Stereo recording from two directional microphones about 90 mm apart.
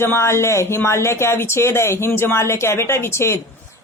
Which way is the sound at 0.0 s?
30° left (ahead or behind).